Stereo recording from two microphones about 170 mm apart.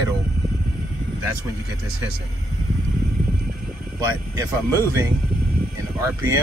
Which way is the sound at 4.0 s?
20° right (ahead or behind).